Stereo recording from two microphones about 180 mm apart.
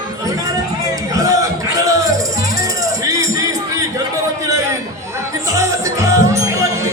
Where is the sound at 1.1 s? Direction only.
20° right (ahead or behind).